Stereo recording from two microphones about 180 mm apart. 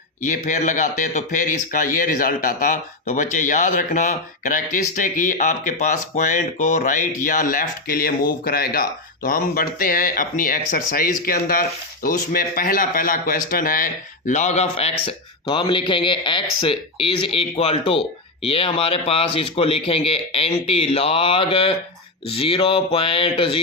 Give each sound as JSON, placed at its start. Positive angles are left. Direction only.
{"t": 0.2, "sound": "a man's voice", "side_deg": 45}